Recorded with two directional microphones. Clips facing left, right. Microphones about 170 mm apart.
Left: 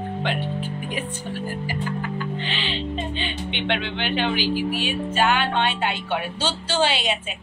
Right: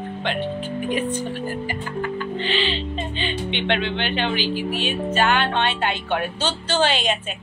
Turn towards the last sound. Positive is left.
turn(degrees=10)  # may be behind; listen again after turning